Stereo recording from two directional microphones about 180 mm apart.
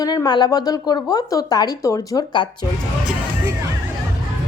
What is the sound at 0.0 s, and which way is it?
A woman's voice, 20° left (ahead or behind).